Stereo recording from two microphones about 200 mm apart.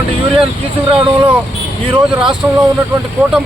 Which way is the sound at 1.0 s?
25° right (ahead or behind).